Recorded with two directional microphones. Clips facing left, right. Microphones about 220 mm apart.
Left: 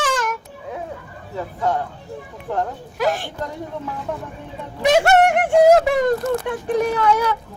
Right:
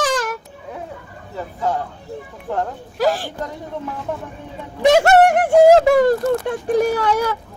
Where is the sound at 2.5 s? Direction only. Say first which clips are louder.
Even; 5° right (ahead or behind).